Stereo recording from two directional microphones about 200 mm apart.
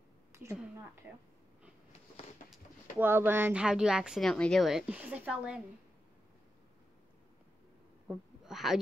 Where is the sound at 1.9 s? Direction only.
30° left (ahead or behind).